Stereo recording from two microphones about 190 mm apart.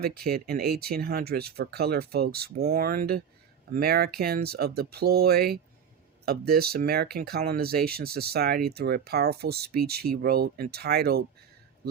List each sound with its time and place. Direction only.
0.0 s speech: 55° right (ahead or behind)